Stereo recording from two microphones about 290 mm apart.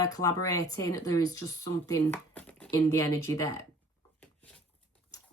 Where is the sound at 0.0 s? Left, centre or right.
Centre.